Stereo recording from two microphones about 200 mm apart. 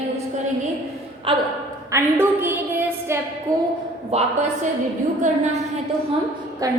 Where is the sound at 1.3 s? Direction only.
25° right (ahead or behind).